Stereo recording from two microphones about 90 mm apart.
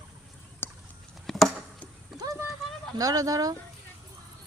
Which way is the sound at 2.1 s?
40° right (ahead or behind).